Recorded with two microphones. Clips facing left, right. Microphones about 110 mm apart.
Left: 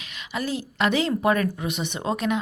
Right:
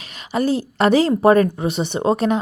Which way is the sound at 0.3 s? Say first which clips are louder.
Right 8 dB; 40° right (ahead or behind).